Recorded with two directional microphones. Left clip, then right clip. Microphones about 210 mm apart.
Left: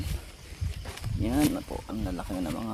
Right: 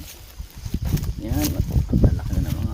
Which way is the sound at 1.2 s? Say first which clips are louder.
Left 2 dB; 25° left (ahead or behind).